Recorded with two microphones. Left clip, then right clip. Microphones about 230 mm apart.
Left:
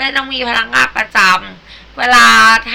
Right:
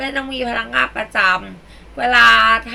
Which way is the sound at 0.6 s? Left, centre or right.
Centre.